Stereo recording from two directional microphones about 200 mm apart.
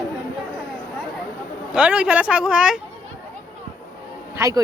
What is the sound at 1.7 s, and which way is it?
Speech, 5° right (ahead or behind).